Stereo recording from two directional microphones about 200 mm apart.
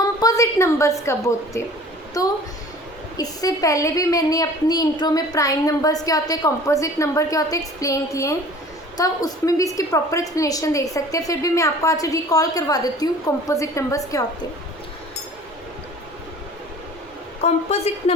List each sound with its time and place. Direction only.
0.0 s a sound: 20° left (ahead or behind)
1.5 s a woman's voice: 15° left (ahead or behind)
17.4 s speech: 30° left (ahead or behind)